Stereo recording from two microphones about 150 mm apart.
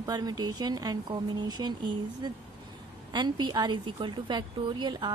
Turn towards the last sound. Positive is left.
turn(degrees=-30)  # may be behind; listen again after turning